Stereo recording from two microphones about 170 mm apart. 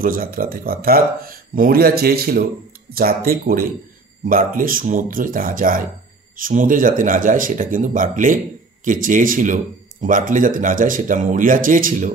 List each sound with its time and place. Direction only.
0.0 s speech: 60° right (ahead or behind)